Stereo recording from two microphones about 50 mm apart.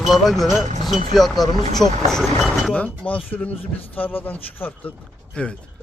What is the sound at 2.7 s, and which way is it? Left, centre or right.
Speech, left.